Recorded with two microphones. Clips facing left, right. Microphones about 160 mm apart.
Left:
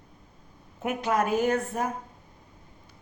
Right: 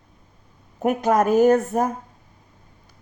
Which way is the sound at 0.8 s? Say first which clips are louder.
Right 7 dB; 40° right (ahead or behind).